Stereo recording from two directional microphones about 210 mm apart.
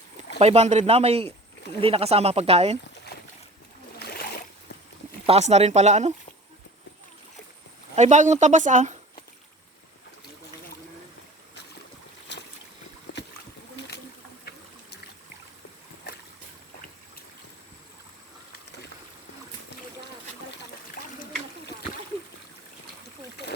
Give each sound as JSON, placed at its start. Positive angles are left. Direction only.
{"t": 0.3, "sound": "a man's voice", "side_deg": -30}
{"t": 3.1, "sound": "boat", "side_deg": 50}
{"t": 4.0, "sound": "a sound", "side_deg": 45}
{"t": 5.2, "sound": "speech", "side_deg": -30}
{"t": 7.9, "sound": "speech", "side_deg": -35}
{"t": 12.3, "sound": "boat", "side_deg": 55}
{"t": 13.7, "sound": "boat", "side_deg": 55}